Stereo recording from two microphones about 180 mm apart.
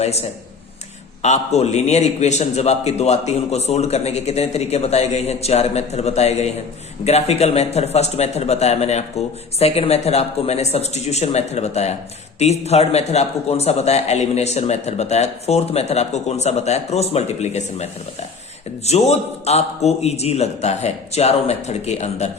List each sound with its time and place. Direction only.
0.0 s a man's voice: 35° left (ahead or behind)
18.9 s a man's voice: 35° left (ahead or behind)